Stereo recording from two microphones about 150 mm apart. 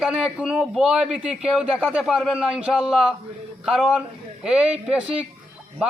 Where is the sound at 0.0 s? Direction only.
5° right (ahead or behind).